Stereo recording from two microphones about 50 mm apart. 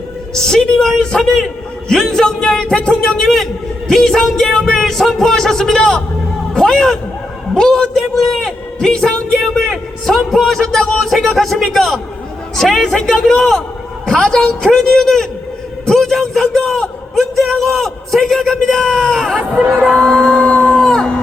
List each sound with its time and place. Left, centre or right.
0.3 s a man's voice: centre
3.2 s a man's voice: centre; by 20.8 s left
20.8 s a sound: centre